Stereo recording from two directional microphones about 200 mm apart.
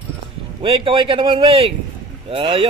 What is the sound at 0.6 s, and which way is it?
Speech, 25° right (ahead or behind).